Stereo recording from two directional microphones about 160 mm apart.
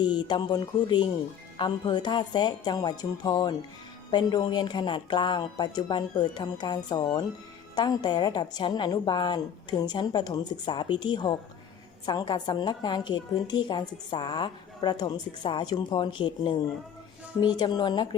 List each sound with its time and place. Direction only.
0.0 s a woman's voice: 25° left (ahead or behind)